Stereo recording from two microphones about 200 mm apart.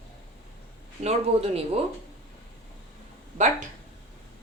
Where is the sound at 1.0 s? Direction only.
30° right (ahead or behind).